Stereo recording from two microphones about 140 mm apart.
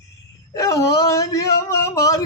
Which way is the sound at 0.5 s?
25° left (ahead or behind).